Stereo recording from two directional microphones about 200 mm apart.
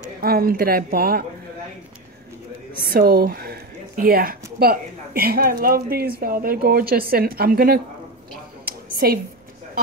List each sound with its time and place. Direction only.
0.2 s speech: 50° right (ahead or behind)
2.9 s speech: 50° right (ahead or behind)
8.6 s a sound: 50° right (ahead or behind)